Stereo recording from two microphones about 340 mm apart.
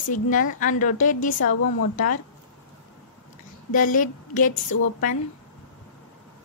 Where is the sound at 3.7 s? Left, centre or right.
Left.